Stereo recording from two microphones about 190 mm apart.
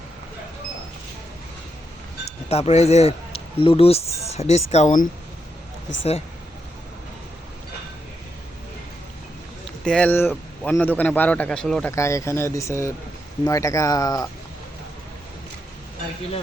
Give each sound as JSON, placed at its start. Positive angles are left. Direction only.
{"t": 2.5, "sound": "speech", "side_deg": 35}
{"t": 9.8, "sound": "speech", "side_deg": 5}